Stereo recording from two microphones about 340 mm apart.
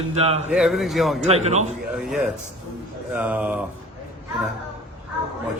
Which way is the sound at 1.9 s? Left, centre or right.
Centre.